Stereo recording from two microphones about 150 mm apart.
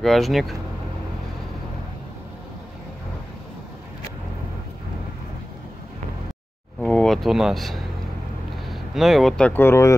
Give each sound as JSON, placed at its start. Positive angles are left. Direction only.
{"t": 0.0, "sound": "speech", "side_deg": 0}
{"t": 6.8, "sound": "a sound", "side_deg": 5}
{"t": 8.6, "sound": "speech", "side_deg": 0}
{"t": 9.5, "sound": "speech", "side_deg": 15}